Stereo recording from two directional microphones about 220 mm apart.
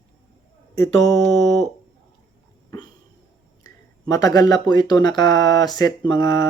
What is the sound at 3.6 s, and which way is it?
Speech, 15° left (ahead or behind).